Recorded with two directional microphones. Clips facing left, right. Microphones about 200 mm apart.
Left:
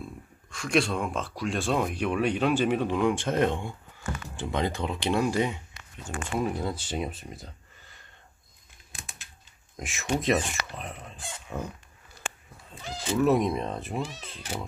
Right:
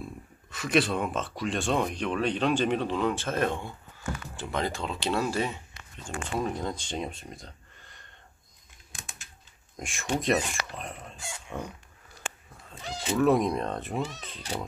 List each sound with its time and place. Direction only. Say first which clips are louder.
0.5 s speech: even; 5° right (ahead or behind)
9.8 s speech: left 1 dB; centre (ahead or behind)
13.1 s speech: even; centre (ahead or behind)